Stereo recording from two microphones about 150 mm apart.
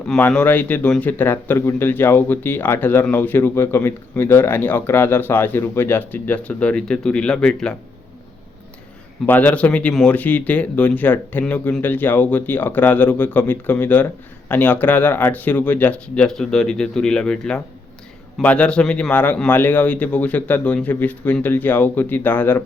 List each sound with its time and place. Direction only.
0.2 s speech: 10° left (ahead or behind)
9.2 s speech: 10° left (ahead or behind)